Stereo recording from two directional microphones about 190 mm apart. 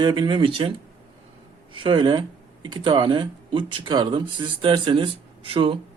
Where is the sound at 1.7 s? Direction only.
25° right (ahead or behind).